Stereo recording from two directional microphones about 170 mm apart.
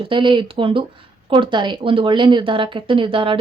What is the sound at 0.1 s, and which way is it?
Speech, 30° right (ahead or behind).